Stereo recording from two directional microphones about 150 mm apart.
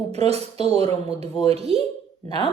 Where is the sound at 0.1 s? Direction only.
45° right (ahead or behind).